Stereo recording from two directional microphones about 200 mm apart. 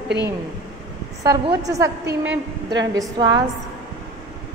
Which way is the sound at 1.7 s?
15° right (ahead or behind).